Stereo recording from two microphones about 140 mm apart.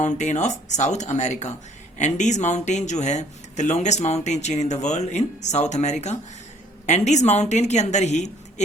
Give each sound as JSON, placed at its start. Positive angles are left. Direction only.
{"t": 0.0, "sound": "speech", "side_deg": 60}